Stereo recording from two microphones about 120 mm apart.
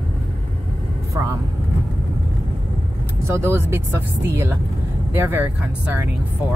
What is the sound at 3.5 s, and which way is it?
Speech, 20° right (ahead or behind).